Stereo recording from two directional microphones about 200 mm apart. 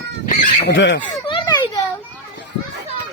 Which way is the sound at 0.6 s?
65° left (ahead or behind).